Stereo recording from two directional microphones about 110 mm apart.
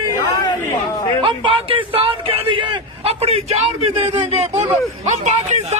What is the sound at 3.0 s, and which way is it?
A man's voice, 65° right (ahead or behind).